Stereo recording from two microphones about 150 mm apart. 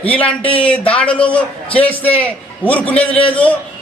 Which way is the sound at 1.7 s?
40° left (ahead or behind).